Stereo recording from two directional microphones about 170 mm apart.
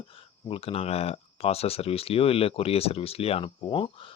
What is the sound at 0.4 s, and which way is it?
Speech, 35° left (ahead or behind).